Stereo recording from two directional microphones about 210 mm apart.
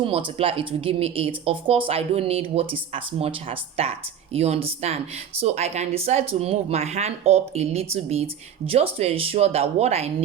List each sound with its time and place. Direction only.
0.0 s speech: 25° right (ahead or behind)